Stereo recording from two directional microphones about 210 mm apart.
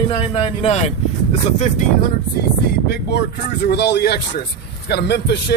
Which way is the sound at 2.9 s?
50° left (ahead or behind).